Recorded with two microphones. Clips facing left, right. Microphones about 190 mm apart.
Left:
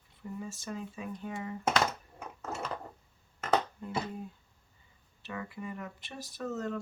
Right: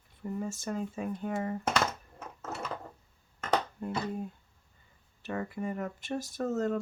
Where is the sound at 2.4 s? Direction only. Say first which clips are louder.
Left 1 dB; 5° right (ahead or behind).